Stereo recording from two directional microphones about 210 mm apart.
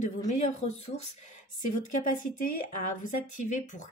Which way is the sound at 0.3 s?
35° left (ahead or behind).